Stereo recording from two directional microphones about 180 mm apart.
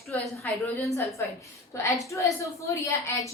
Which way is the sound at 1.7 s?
15° left (ahead or behind).